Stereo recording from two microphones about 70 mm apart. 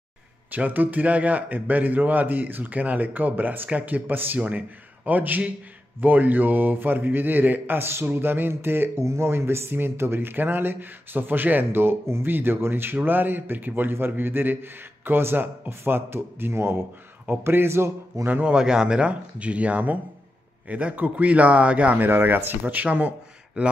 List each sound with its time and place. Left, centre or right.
0.5 s a man's voice: right
18.4 s a man's voice: centre